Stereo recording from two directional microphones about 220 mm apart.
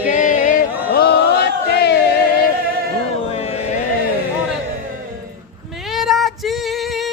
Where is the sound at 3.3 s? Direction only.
30° left (ahead or behind).